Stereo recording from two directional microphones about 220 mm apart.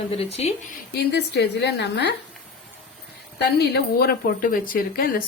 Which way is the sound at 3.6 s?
45° left (ahead or behind).